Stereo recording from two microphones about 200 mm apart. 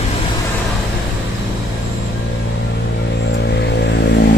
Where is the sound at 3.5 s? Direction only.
55° left (ahead or behind).